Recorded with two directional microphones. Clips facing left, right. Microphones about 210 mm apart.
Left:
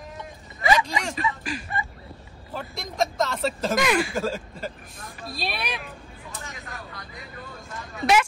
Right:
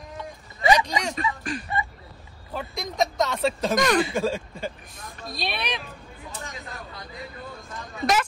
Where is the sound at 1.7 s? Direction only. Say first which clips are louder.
Right 4 dB; 25° right (ahead or behind).